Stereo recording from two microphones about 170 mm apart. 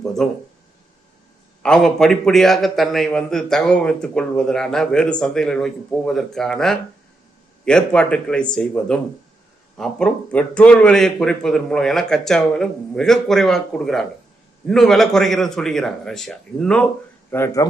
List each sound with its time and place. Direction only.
0.0 s speech: 5° left (ahead or behind)
1.6 s a man's voice: 5° left (ahead or behind)
17.3 s a man's voice: 15° left (ahead or behind)